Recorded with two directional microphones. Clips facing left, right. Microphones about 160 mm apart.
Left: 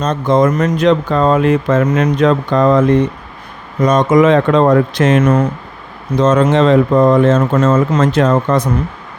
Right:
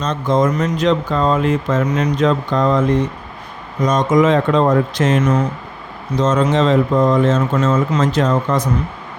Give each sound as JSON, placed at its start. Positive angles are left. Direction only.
{"t": 0.0, "sound": "speech", "side_deg": 55}